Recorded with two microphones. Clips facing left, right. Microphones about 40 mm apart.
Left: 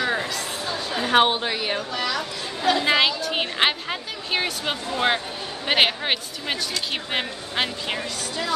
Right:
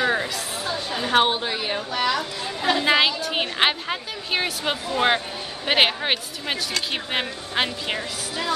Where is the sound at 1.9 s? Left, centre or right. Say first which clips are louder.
Right 3 dB; right.